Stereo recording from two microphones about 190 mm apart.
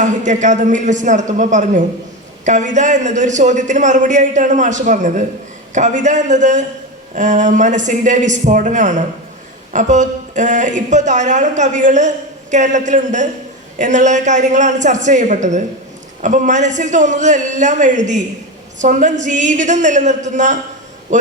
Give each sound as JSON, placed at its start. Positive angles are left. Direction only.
{"t": 0.0, "sound": "a woman's voice", "side_deg": -40}